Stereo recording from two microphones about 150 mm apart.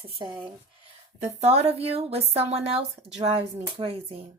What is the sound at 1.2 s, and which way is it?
A woman's voice, 45° right (ahead or behind).